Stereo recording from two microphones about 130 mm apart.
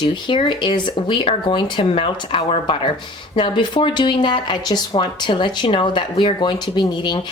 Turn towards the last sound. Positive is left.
turn(degrees=35)  # may be behind; listen again after turning